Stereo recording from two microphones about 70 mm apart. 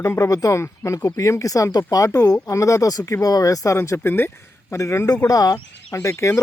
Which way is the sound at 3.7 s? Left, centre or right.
Left.